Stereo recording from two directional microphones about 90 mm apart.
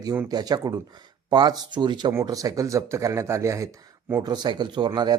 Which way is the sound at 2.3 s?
40° right (ahead or behind).